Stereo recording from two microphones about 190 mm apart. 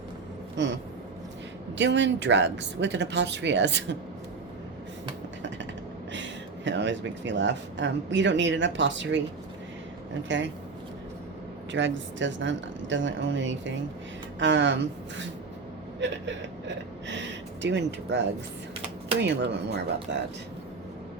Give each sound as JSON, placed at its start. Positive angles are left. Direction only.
{"t": 0.5, "sound": "a sound", "side_deg": -70}
{"t": 1.8, "sound": "speech", "side_deg": -70}
{"t": 6.1, "sound": "speech", "side_deg": -70}
{"t": 10.2, "sound": "speech", "side_deg": -70}
{"t": 11.7, "sound": "speech", "side_deg": -70}
{"t": 16.0, "sound": "a sound", "side_deg": -70}
{"t": 19.2, "sound": "speech", "side_deg": -65}